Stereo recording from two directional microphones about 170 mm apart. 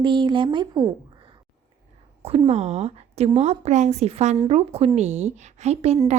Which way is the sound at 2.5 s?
40° right (ahead or behind).